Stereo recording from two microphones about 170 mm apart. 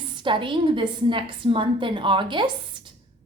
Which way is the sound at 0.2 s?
30° right (ahead or behind).